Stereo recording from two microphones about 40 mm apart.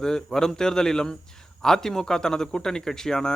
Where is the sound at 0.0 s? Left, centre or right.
Centre.